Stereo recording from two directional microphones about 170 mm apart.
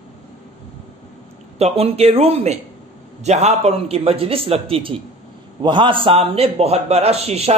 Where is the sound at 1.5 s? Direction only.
35° right (ahead or behind).